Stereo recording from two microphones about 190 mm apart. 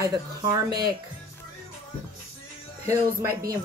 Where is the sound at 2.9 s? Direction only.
15° right (ahead or behind).